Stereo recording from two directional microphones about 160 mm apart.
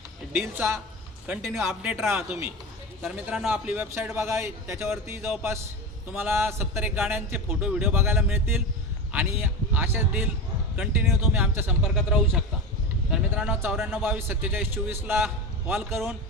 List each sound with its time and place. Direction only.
1.3 s a man's voice: 5° right (ahead or behind)
11.8 s speech: centre (ahead or behind)
14.0 s a man's voice: 15° right (ahead or behind)